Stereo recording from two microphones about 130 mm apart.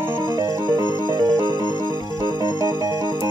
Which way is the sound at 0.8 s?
35° left (ahead or behind).